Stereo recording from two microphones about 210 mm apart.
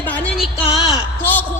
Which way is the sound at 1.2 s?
10° left (ahead or behind).